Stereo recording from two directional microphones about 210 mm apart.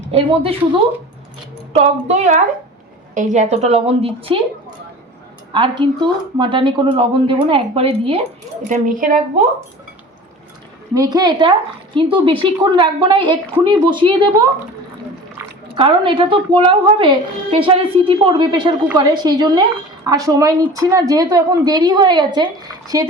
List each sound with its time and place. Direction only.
0.1 s a woman's voice: 30° right (ahead or behind)
1.7 s a woman's voice: 30° right (ahead or behind)
5.5 s a woman's voice: 20° right (ahead or behind)
8.7 s speech: 40° right (ahead or behind)
10.9 s a woman's voice: 20° right (ahead or behind)
15.7 s a woman's voice: 25° right (ahead or behind)